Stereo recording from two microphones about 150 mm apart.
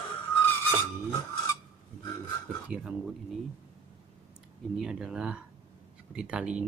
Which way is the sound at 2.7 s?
5° right (ahead or behind).